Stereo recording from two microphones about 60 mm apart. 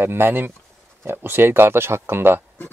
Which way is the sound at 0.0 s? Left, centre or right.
Right.